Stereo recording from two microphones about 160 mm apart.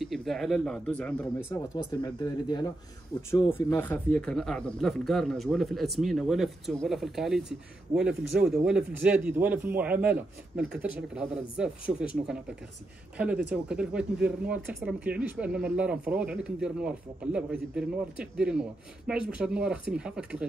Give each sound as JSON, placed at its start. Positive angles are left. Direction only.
{"t": 0.0, "sound": "speech", "side_deg": 0}
{"t": 1.5, "sound": "speech", "side_deg": 25}
{"t": 3.2, "sound": "speech", "side_deg": 15}
{"t": 13.5, "sound": "speech", "side_deg": -5}